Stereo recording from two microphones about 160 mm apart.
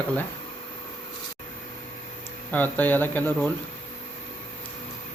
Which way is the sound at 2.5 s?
10° left (ahead or behind).